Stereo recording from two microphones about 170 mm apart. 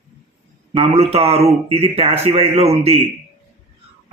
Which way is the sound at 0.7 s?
35° right (ahead or behind).